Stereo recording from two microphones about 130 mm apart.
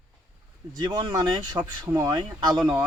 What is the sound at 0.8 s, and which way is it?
Speech, 35° right (ahead or behind).